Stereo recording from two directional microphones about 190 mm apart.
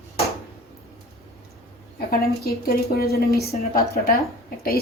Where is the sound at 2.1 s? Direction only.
55° left (ahead or behind).